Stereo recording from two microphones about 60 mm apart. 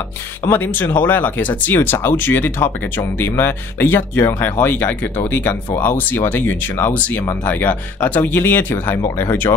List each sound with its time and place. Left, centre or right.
0.5 s speech: left